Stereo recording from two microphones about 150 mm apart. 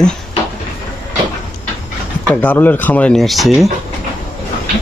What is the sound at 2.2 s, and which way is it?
A man's voice, 10° left (ahead or behind).